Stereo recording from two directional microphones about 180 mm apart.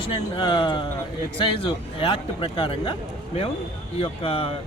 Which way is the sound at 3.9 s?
30° left (ahead or behind).